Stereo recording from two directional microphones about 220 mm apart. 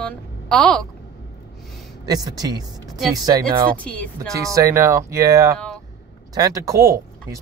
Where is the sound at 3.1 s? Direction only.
15° right (ahead or behind).